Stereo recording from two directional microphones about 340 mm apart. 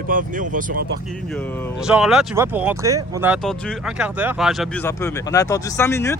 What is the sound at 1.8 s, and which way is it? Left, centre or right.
Speech, centre.